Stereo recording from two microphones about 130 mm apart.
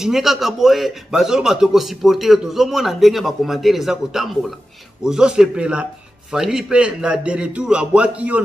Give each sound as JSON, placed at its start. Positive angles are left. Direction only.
{"t": 0.0, "sound": "a man's voice", "side_deg": -5}